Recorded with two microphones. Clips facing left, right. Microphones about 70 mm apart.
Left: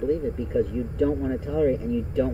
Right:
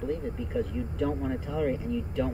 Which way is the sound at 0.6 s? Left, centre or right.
Centre.